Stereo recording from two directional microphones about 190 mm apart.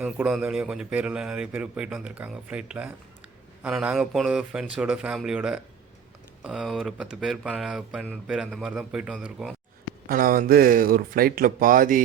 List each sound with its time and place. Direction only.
0.0 s speech: 5° right (ahead or behind)
10.1 s speech: 50° right (ahead or behind)